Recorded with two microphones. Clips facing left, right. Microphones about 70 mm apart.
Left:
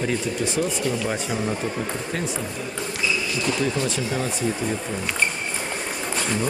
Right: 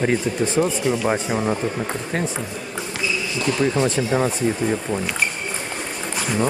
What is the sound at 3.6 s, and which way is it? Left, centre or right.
Speech, right.